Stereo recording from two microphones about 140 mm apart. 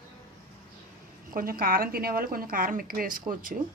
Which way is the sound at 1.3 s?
90° right.